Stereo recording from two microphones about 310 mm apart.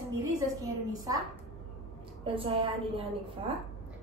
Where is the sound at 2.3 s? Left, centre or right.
Centre.